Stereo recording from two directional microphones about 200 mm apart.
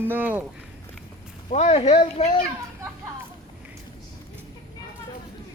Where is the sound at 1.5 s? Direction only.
35° left (ahead or behind).